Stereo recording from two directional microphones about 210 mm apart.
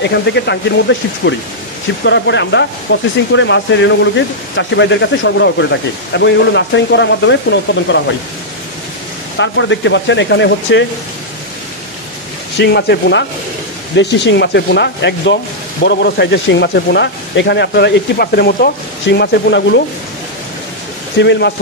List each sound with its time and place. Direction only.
0.1 s speech: 55° left (ahead or behind)
9.4 s speech: 60° left (ahead or behind)
12.5 s speech: 55° left (ahead or behind)
21.2 s speech: 55° left (ahead or behind)